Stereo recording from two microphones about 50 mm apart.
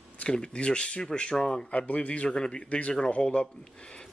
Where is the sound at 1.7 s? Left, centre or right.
Left.